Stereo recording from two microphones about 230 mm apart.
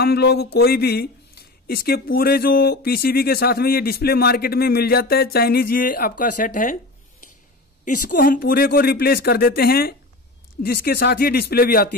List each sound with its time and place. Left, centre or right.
0.0 s speech: left
7.8 s speech: left